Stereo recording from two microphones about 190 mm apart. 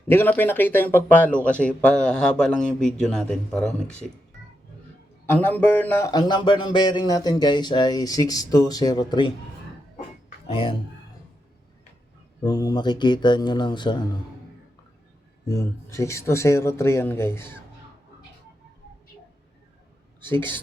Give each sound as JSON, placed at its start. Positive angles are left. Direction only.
{"t": 0.1, "sound": "speech", "side_deg": 10}
{"t": 5.2, "sound": "speech", "side_deg": 10}
{"t": 10.5, "sound": "speech", "side_deg": 30}
{"t": 12.4, "sound": "speech", "side_deg": 20}
{"t": 15.4, "sound": "speech", "side_deg": 15}